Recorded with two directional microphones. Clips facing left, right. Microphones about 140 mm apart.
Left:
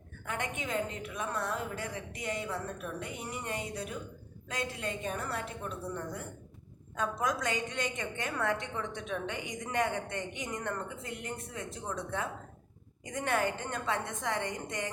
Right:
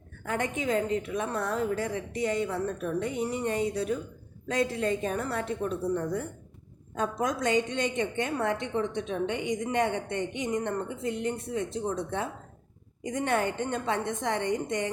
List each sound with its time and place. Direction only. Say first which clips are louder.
0.3 s a woman's voice: right 7 dB; 35° right (ahead or behind)